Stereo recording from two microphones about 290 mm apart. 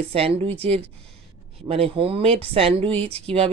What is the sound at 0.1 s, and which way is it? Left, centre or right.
Speech, centre.